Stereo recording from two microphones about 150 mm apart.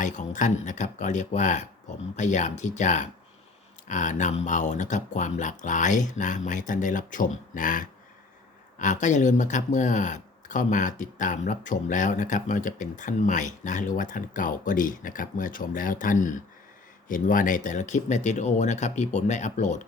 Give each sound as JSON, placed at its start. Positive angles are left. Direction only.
{"t": 0.0, "sound": "speech", "side_deg": 55}